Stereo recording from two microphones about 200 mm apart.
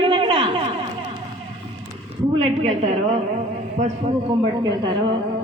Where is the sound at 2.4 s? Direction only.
30° right (ahead or behind).